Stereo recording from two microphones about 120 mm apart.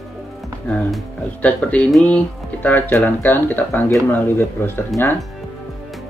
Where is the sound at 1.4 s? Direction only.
10° left (ahead or behind).